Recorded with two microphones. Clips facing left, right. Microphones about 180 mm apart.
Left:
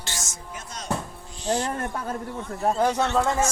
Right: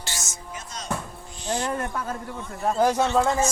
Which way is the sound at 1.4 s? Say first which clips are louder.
Left 2 dB; 35° left (ahead or behind).